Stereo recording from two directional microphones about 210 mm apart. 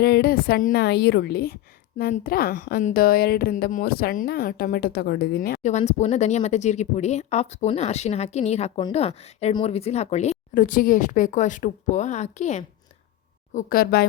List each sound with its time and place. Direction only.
0.0 s a woman's voice: 50° left (ahead or behind)